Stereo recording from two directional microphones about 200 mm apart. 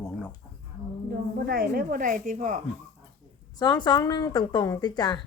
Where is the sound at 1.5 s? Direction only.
50° right (ahead or behind).